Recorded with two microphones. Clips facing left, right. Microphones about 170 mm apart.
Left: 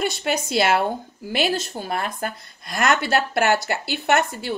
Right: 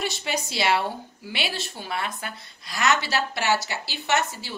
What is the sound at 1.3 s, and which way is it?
A woman's voice, 45° left (ahead or behind).